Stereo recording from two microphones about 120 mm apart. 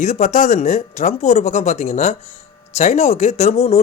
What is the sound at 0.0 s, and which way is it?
Speech, 90° left.